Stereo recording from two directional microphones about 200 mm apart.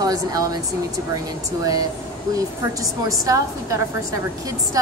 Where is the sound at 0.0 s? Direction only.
20° right (ahead or behind).